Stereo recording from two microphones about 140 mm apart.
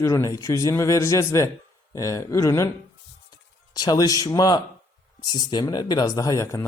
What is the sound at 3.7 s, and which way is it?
Speech, 30° left (ahead or behind).